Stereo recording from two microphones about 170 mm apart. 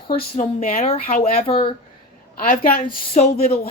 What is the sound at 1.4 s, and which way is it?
Speech, 30° left (ahead or behind).